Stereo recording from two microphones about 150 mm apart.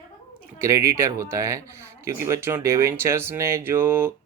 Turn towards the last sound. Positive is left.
turn(degrees=-15)  # may be behind; listen again after turning